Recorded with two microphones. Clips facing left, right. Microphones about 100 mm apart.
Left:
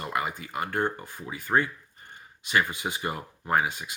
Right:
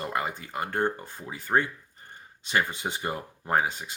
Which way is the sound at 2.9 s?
30° right (ahead or behind).